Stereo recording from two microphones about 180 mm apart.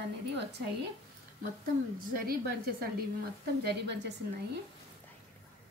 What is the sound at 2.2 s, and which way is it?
Speech, 55° right (ahead or behind).